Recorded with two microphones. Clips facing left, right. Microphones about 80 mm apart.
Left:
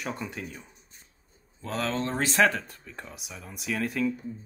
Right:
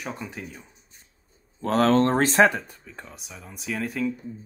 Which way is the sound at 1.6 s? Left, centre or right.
Right.